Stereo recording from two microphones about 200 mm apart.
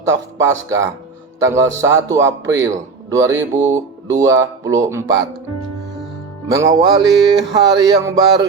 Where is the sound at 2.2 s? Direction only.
75° right (ahead or behind).